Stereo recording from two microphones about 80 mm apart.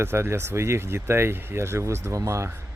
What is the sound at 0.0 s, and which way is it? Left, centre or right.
Speech, right.